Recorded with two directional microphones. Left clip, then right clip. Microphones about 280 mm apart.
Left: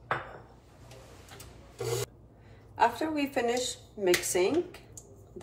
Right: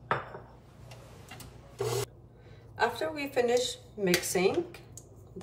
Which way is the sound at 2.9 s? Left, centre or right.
Centre.